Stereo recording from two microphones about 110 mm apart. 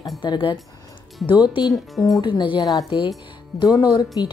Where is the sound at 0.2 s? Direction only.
45° left (ahead or behind).